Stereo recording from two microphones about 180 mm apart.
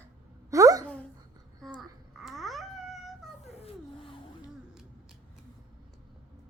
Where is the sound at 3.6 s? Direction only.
30° left (ahead or behind).